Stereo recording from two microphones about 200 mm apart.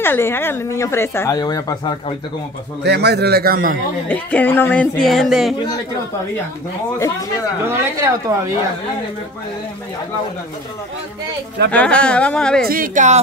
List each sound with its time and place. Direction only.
0.0 s a woman's voice: 10° left (ahead or behind)
2.8 s a man's voice: 55° right (ahead or behind)
4.1 s a woman's voice: 10° left (ahead or behind)
7.6 s speech: 10° right (ahead or behind)
11.7 s speech: 5° left (ahead or behind)
12.6 s speech: 45° right (ahead or behind)